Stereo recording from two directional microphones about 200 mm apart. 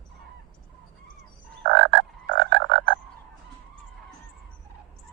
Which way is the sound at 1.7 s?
60° right (ahead or behind).